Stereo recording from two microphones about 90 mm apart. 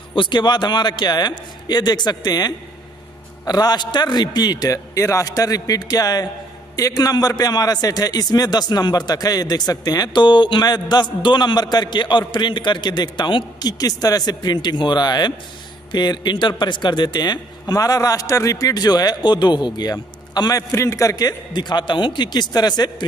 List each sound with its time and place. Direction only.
0.1 s a man's voice: 60° left (ahead or behind); by 20.6 s 45° left (ahead or behind)
20.7 s a man's voice: 35° left (ahead or behind); by 23.0 s 50° left (ahead or behind)